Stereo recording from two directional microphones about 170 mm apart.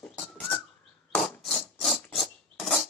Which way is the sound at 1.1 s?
Centre (ahead or behind).